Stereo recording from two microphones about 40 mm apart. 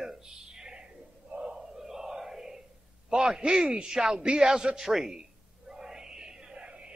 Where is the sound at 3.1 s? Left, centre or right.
Centre.